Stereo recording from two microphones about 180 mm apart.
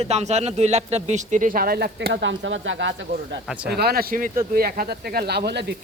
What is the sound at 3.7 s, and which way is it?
Speech, 60° right (ahead or behind).